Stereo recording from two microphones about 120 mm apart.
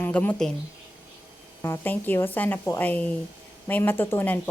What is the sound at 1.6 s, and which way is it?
Speech, 20° left (ahead or behind).